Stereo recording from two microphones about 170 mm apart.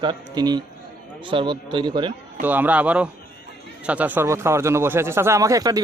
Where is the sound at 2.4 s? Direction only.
10° right (ahead or behind).